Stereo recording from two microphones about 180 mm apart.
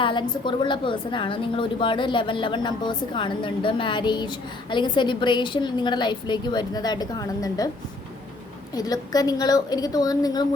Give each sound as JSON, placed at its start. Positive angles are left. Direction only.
{"t": 0.0, "sound": "a woman's voice", "side_deg": 25}
{"t": 8.7, "sound": "a woman's voice", "side_deg": 20}